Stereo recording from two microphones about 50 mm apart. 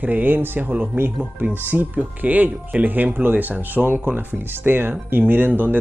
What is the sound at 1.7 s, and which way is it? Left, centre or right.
Speech, right.